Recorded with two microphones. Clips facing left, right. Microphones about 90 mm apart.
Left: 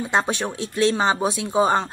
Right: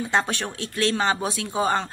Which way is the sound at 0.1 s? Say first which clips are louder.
Left 3 dB; 15° left (ahead or behind).